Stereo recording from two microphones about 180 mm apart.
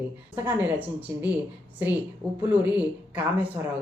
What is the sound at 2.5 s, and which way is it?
Speech, 10° right (ahead or behind).